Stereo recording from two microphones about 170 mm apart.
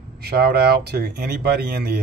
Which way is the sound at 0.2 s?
70° right (ahead or behind).